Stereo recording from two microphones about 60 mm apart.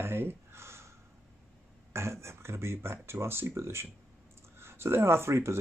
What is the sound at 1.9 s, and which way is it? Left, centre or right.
Speech, right.